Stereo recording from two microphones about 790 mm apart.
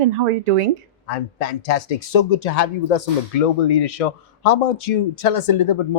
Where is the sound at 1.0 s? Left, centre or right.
Left.